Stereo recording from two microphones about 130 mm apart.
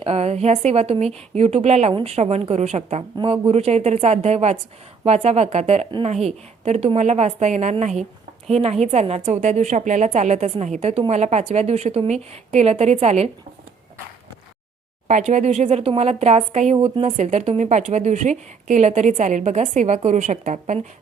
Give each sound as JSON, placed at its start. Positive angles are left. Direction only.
{"t": 0.0, "sound": "a woman's voice", "side_deg": -55}
{"t": 15.0, "sound": "a woman's voice", "side_deg": -65}